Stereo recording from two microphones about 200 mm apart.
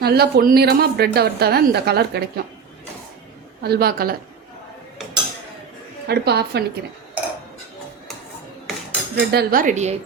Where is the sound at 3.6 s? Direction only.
50° right (ahead or behind).